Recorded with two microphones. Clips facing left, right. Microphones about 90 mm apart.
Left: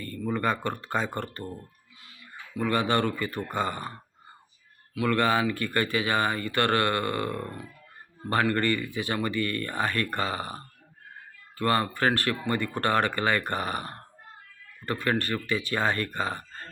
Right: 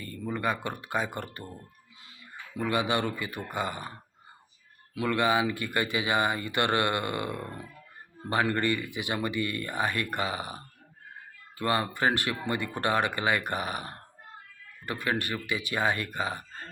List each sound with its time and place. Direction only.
0.0 s speech: 10° right (ahead or behind)
2.6 s speech: 15° right (ahead or behind)
4.9 s speech: 15° right (ahead or behind)